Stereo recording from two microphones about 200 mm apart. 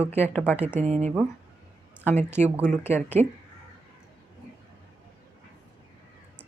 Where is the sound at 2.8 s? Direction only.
10° left (ahead or behind).